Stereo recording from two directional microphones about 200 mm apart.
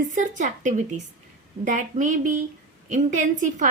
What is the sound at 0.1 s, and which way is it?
A woman's voice, 40° right (ahead or behind).